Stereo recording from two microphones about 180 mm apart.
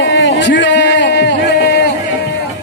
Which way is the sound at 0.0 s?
75° left (ahead or behind).